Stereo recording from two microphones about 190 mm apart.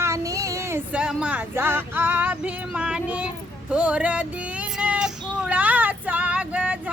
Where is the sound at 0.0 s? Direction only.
15° right (ahead or behind).